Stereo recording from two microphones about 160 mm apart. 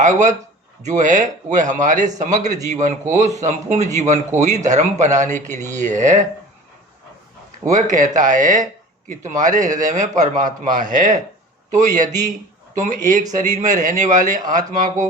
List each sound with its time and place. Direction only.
0.0 s speech: 50° right (ahead or behind)
7.7 s a man's voice: 50° right (ahead or behind)